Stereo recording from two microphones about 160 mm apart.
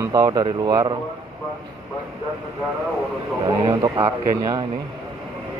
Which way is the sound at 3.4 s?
25° right (ahead or behind).